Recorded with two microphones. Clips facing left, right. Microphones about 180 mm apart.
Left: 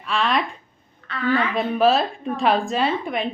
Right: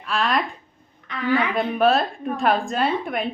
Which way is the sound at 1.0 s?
15° right (ahead or behind).